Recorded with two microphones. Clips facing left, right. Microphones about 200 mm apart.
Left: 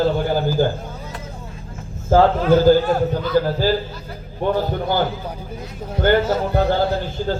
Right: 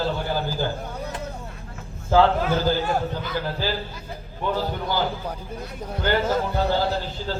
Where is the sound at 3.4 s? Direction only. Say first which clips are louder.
Left 11 dB; 45° left (ahead or behind).